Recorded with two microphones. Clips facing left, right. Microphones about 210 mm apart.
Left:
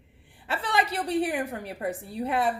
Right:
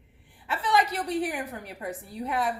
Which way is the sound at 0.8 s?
30° left (ahead or behind).